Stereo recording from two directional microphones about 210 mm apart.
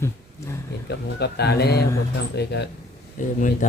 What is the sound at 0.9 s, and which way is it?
Speech, 50° left (ahead or behind).